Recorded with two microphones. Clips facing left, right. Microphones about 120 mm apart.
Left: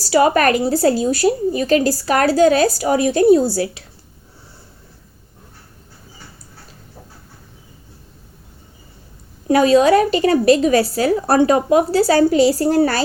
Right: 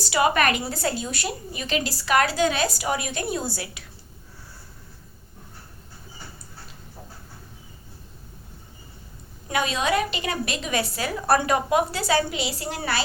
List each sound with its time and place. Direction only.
0.0 s a woman's voice: 40° left (ahead or behind)
9.5 s a woman's voice: 35° left (ahead or behind)